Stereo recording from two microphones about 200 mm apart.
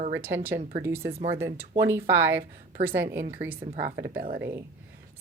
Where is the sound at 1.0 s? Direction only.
35° right (ahead or behind).